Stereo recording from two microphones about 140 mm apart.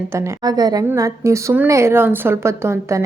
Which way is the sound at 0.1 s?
20° right (ahead or behind).